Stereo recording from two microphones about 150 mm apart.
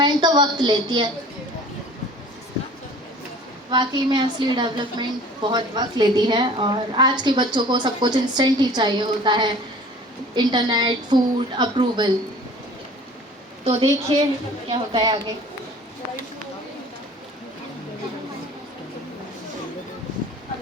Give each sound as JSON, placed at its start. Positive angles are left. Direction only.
{"t": 0.0, "sound": "a woman's voice", "side_deg": -30}
{"t": 3.7, "sound": "a woman's voice", "side_deg": -30}
{"t": 13.7, "sound": "a woman's voice", "side_deg": -40}